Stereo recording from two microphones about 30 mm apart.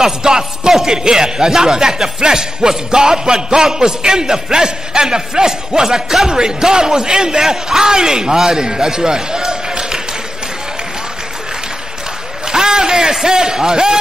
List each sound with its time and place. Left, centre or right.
0.0 s speech: right
12.4 s speech: right